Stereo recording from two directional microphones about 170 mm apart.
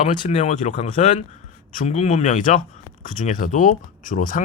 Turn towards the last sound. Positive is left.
turn(degrees=50)  # may be behind; listen again after turning